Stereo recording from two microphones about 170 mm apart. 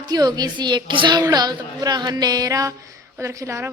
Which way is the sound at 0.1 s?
25° right (ahead or behind).